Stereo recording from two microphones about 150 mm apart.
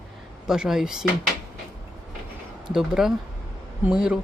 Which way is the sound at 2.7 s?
5° right (ahead or behind).